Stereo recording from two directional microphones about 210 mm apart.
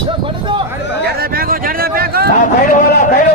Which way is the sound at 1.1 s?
45° right (ahead or behind).